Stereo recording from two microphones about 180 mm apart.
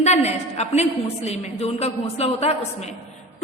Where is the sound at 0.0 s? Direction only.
35° left (ahead or behind).